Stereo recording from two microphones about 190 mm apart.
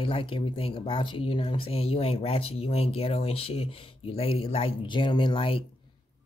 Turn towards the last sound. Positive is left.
turn(degrees=30)  # may be behind; listen again after turning